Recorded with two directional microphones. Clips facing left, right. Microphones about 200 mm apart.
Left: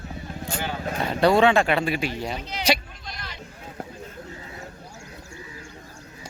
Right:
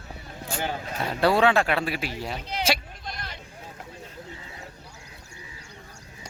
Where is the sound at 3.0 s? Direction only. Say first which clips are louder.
Right 1 dB; 55° right (ahead or behind).